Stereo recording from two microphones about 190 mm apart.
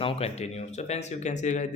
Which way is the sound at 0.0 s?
35° left (ahead or behind).